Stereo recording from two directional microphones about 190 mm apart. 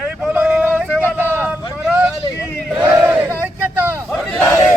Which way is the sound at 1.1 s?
10° right (ahead or behind).